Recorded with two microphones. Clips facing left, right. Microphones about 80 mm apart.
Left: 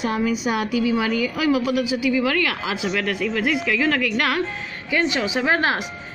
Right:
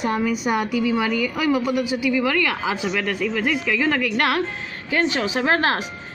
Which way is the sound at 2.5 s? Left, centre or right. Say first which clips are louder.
Right 2 dB; right.